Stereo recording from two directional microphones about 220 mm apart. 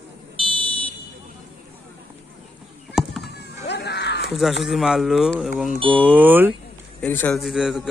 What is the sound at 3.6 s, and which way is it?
Screaming, 50° left (ahead or behind).